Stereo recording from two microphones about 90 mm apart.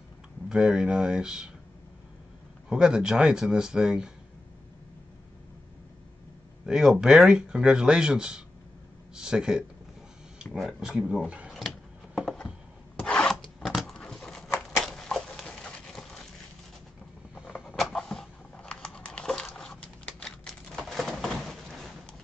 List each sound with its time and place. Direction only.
0.5 s speech: 5° right (ahead or behind)
2.7 s speech: 10° right (ahead or behind)
6.6 s speech: 5° right (ahead or behind)
12.9 s filing: 10° left (ahead or behind)
13.9 s a sound: 10° left (ahead or behind)
17.7 s a sound: 5° left (ahead or behind)